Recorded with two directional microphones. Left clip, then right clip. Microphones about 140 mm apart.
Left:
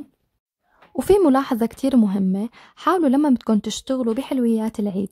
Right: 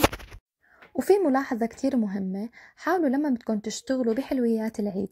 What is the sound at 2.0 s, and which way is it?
Speech, 55° left (ahead or behind).